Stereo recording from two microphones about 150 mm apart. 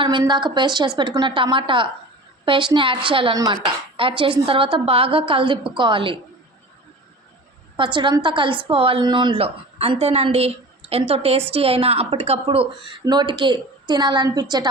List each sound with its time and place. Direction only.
0.0 s a woman's voice: 30° right (ahead or behind)
7.8 s a woman's voice: 35° right (ahead or behind)